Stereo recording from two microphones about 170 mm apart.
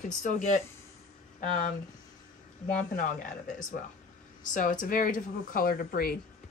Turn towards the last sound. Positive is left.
turn(degrees=60)  # may be behind; listen again after turning